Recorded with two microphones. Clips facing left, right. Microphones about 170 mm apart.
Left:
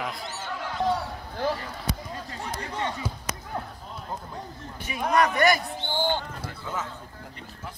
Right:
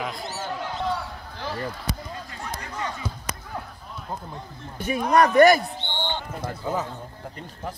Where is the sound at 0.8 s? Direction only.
50° left (ahead or behind).